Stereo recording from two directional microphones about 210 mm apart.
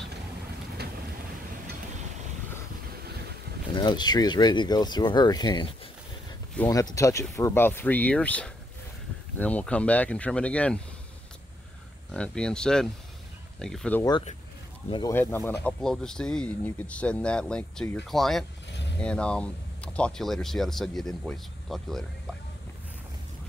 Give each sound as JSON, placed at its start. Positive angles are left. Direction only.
{"t": 3.7, "sound": "speech", "side_deg": 20}
{"t": 6.7, "sound": "speech", "side_deg": 15}
{"t": 12.1, "sound": "speech", "side_deg": 5}
{"t": 14.9, "sound": "speech", "side_deg": 20}
{"t": 15.1, "sound": "speech", "side_deg": 10}